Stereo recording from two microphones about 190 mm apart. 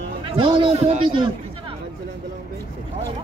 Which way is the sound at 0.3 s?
25° right (ahead or behind).